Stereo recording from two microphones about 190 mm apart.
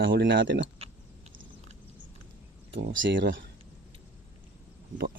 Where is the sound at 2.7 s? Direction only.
75° right (ahead or behind).